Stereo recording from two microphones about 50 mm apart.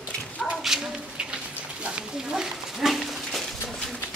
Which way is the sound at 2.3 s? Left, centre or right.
Centre.